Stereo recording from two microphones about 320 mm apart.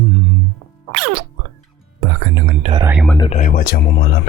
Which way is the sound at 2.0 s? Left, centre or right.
Right.